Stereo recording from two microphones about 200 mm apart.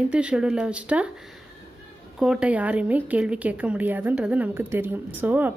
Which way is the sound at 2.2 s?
5° right (ahead or behind).